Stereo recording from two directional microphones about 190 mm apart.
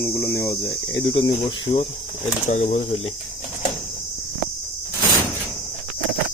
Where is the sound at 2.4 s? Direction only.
35° left (ahead or behind).